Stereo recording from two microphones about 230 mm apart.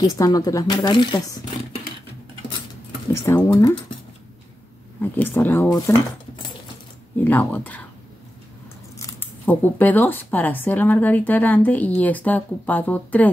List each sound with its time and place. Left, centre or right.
0.0 s speech: centre
3.1 s speech: centre
5.1 s speech: centre
7.2 s speech: centre
8.9 s speech: centre